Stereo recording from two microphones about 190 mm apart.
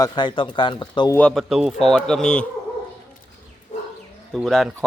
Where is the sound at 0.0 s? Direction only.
25° left (ahead or behind).